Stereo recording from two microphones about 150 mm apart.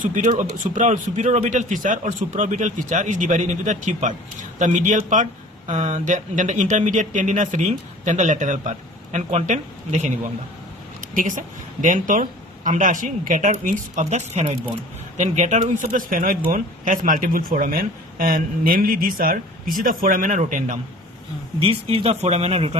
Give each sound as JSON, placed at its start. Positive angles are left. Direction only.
{"t": 0.0, "sound": "speech", "side_deg": -60}
{"t": 11.1, "sound": "speech", "side_deg": -60}
{"t": 21.6, "sound": "speech", "side_deg": -40}